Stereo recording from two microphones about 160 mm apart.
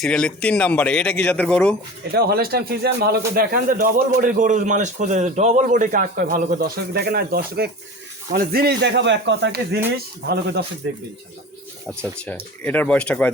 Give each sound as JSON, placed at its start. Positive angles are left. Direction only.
{"t": 0.0, "sound": "a man's voice", "side_deg": 5}
{"t": 2.1, "sound": "speech", "side_deg": -80}
{"t": 11.9, "sound": "a man's voice", "side_deg": 5}